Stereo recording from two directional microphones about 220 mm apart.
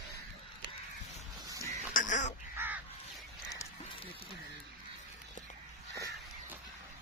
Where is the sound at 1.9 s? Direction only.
35° left (ahead or behind).